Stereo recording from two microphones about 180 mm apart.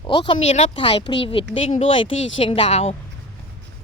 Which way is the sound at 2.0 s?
90° left.